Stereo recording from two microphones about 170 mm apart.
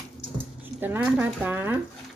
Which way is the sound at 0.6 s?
10° right (ahead or behind).